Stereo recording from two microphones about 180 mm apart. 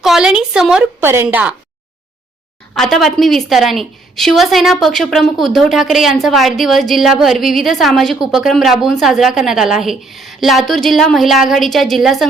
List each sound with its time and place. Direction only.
0.0 s a sound: 5° right (ahead or behind)
1.0 s speech: 10° right (ahead or behind)
2.7 s a woman's voice: centre (ahead or behind)